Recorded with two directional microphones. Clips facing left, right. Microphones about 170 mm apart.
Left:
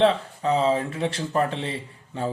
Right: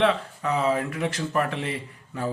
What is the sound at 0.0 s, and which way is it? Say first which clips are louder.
Speech: left 3 dB; 30° left (ahead or behind).